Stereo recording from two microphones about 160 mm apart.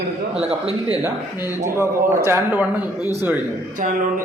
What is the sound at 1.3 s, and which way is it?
Speech, 20° left (ahead or behind).